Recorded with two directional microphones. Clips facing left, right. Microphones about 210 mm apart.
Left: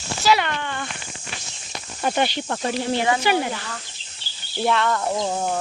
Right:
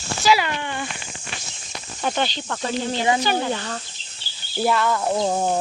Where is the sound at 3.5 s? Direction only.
35° right (ahead or behind).